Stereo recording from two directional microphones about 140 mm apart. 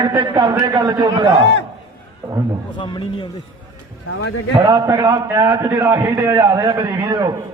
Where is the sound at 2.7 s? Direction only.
35° left (ahead or behind).